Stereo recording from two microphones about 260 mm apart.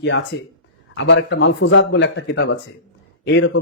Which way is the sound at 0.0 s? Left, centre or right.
Left.